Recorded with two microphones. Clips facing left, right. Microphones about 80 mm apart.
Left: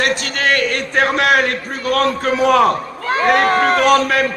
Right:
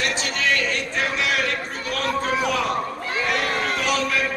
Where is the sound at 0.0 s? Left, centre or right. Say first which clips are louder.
Left 6 dB; left.